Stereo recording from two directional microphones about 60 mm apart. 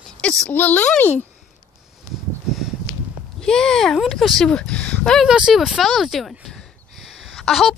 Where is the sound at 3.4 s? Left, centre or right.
Centre.